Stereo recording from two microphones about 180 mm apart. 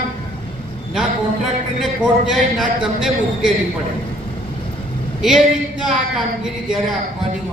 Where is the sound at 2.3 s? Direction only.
Centre (ahead or behind).